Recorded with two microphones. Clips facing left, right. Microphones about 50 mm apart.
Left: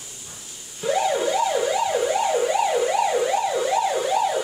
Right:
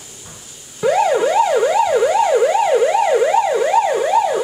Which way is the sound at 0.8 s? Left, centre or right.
Right.